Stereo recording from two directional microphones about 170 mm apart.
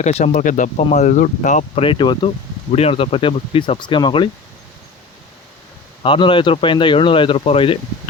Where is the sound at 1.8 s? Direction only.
30° left (ahead or behind).